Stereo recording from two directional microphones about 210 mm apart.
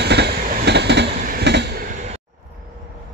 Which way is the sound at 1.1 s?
45° right (ahead or behind).